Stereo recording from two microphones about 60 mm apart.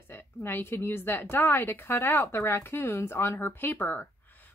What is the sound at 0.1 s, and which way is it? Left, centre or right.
A woman's voice, left.